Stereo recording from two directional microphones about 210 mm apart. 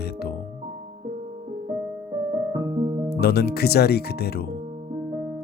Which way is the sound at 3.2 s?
50° left (ahead or behind).